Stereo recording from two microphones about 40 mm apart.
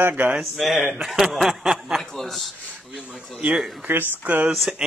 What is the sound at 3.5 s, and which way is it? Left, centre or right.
Speech, centre.